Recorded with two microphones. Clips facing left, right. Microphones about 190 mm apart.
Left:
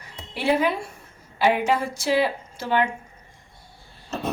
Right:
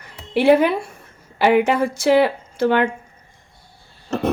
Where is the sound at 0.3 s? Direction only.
65° right (ahead or behind).